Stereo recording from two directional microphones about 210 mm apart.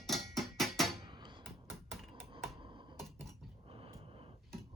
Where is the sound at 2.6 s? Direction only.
25° right (ahead or behind).